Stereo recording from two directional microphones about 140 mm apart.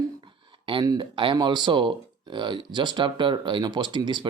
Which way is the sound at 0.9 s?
35° right (ahead or behind).